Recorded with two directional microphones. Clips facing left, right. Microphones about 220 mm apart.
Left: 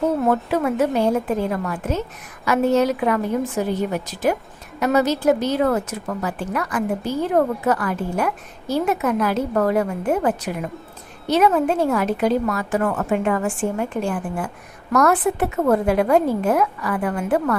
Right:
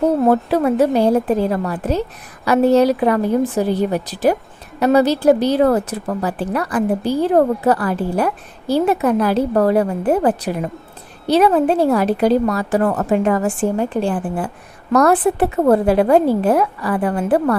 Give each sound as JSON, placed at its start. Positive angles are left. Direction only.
{"t": 0.0, "sound": "a woman's voice", "side_deg": -35}